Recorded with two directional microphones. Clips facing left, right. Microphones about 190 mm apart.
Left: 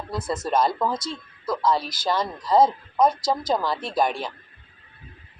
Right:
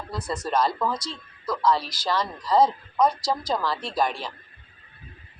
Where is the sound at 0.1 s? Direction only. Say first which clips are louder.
Left 2 dB; 50° left (ahead or behind).